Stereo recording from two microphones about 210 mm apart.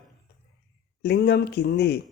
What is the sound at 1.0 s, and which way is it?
Speech, 50° left (ahead or behind).